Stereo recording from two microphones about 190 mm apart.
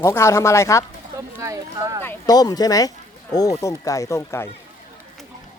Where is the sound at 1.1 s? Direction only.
15° right (ahead or behind).